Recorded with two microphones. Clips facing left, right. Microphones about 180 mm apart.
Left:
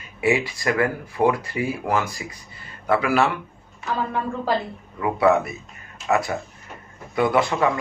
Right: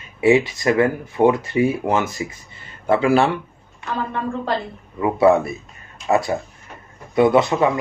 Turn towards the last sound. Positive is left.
turn(degrees=-20)  # may be behind; listen again after turning